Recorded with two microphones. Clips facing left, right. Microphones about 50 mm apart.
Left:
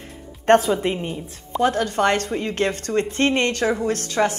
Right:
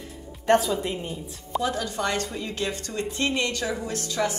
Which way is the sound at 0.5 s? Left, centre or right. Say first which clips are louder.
Left 5 dB; left.